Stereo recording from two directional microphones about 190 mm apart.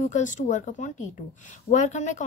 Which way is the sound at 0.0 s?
40° left (ahead or behind).